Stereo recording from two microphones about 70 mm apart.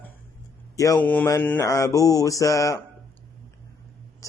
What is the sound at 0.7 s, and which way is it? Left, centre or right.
Speech, left.